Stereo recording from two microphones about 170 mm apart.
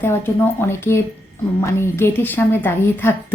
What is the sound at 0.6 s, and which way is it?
A woman's voice, 15° left (ahead or behind).